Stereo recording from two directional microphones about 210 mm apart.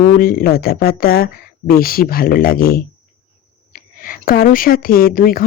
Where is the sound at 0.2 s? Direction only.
45° left (ahead or behind).